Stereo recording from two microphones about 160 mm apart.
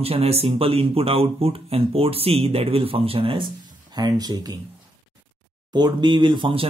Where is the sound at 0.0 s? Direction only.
40° right (ahead or behind).